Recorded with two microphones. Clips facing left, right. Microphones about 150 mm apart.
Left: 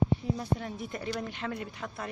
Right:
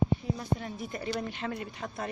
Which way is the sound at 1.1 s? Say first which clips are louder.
Right 2 dB; 20° right (ahead or behind).